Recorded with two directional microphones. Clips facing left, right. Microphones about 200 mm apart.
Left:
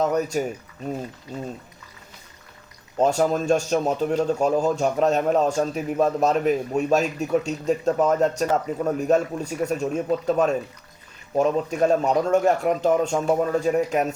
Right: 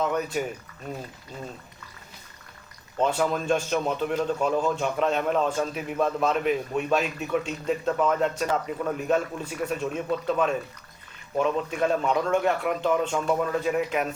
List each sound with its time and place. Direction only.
0.0 s speech: 40° left (ahead or behind)
3.0 s speech: 40° left (ahead or behind)